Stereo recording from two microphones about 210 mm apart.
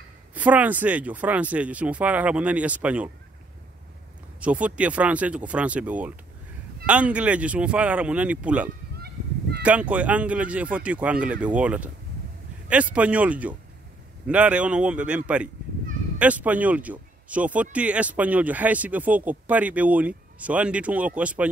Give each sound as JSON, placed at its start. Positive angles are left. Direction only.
{"t": 0.3, "sound": "speech", "side_deg": -5}
{"t": 4.4, "sound": "speech", "side_deg": -5}
{"t": 8.9, "sound": "honk", "side_deg": -50}
{"t": 9.6, "sound": "speech", "side_deg": -5}